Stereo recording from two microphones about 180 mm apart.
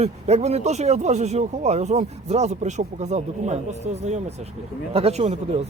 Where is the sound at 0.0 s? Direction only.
35° right (ahead or behind).